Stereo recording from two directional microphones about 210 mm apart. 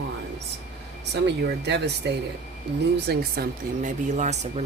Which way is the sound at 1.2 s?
55° right (ahead or behind).